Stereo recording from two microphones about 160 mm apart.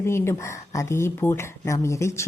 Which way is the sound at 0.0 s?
15° left (ahead or behind).